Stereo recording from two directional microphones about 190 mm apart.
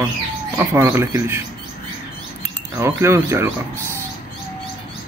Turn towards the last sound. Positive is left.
turn(degrees=-15)  # may be behind; listen again after turning